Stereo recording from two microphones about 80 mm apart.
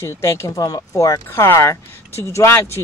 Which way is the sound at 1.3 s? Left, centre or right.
Left.